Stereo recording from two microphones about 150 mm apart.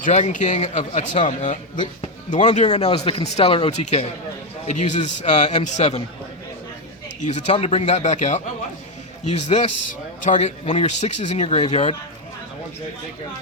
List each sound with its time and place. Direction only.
0.0 s speech: 50° left (ahead or behind)
7.2 s speech: 50° left (ahead or behind)